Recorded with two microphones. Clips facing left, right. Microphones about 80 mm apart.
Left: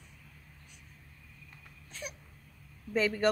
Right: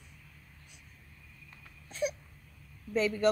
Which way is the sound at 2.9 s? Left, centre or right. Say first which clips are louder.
Even; left.